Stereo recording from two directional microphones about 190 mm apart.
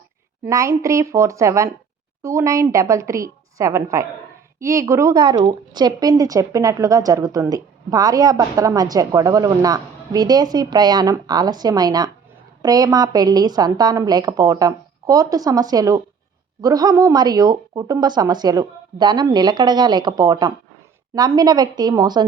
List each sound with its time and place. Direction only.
0.4 s a woman's voice: 15° right (ahead or behind)